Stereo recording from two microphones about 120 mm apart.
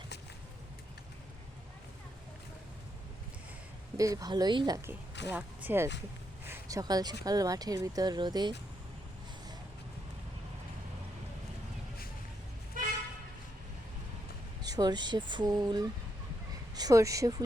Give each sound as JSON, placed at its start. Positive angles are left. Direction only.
{"t": 3.9, "sound": "speech", "side_deg": -30}
{"t": 4.9, "sound": "speech", "side_deg": -15}
{"t": 14.6, "sound": "speech", "side_deg": -35}